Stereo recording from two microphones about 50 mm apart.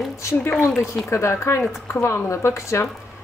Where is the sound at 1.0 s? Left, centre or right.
Left.